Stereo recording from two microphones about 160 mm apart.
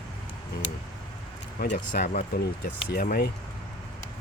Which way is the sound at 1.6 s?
65° left (ahead or behind).